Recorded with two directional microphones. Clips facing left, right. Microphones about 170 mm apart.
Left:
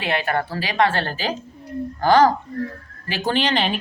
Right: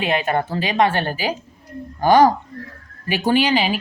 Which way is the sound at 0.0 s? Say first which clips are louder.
Right 3 dB; 20° right (ahead or behind).